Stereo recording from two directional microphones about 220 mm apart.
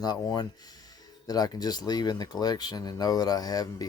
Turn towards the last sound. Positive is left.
turn(degrees=15)  # may be behind; listen again after turning